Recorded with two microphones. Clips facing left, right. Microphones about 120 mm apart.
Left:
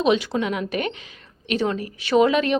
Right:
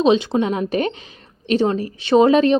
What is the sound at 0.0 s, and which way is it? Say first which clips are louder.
A woman's voice: right 4 dB; 25° right (ahead or behind).